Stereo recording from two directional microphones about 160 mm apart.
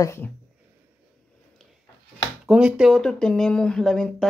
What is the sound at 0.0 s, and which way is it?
Speech, 15° left (ahead or behind).